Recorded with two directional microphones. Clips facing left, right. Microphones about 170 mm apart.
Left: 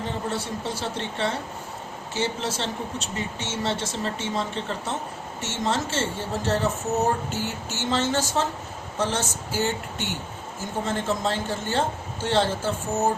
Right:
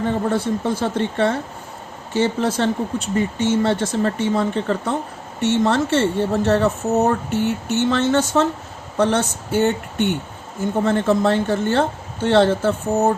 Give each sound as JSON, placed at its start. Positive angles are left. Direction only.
{"t": 0.3, "sound": "a woman's voice", "side_deg": -55}